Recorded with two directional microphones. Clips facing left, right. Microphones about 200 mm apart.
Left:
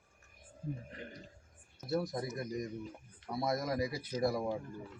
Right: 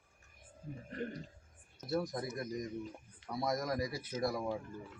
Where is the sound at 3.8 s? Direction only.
30° left (ahead or behind).